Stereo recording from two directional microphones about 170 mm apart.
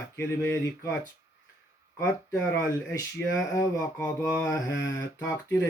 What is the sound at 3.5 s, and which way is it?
Speech, 20° left (ahead or behind).